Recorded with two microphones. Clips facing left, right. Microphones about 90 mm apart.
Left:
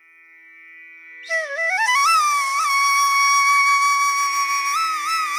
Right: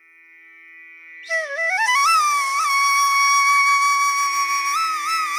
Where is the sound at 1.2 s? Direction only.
Centre (ahead or behind).